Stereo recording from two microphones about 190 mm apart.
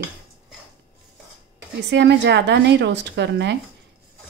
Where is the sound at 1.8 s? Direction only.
65° right (ahead or behind).